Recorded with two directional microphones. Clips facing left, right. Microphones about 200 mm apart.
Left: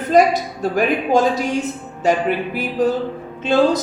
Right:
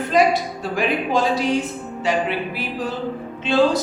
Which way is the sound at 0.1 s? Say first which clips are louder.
Left 3 dB; 45° left (ahead or behind).